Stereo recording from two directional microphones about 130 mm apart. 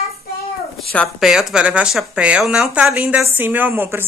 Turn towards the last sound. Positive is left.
turn(degrees=-15)  # may be behind; listen again after turning